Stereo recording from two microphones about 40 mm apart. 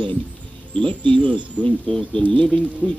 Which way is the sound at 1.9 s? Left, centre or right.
Centre.